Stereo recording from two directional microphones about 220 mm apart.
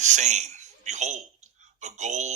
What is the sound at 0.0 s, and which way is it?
A man's voice, 30° right (ahead or behind).